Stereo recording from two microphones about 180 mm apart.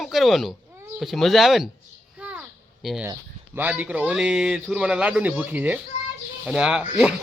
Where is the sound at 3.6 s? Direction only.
10° right (ahead or behind).